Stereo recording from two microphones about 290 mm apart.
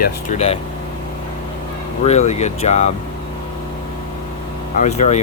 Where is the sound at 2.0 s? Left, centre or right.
Left.